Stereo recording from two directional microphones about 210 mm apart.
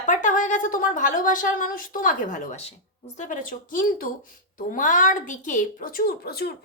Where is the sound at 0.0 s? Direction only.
40° left (ahead or behind).